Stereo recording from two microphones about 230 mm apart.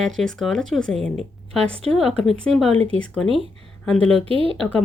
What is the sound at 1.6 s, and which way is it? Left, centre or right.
Speech, right.